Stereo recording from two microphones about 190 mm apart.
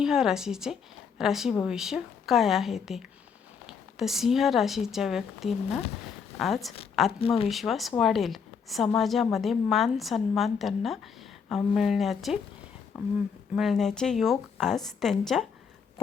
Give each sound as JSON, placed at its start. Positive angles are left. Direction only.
{"t": 0.0, "sound": "a woman's voice", "side_deg": -5}
{"t": 7.2, "sound": "speech", "side_deg": 30}
{"t": 7.5, "sound": "a woman's voice", "side_deg": 0}